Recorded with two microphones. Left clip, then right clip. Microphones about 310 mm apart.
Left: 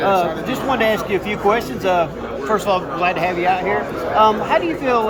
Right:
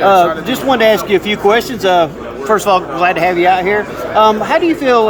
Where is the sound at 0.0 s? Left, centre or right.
Centre.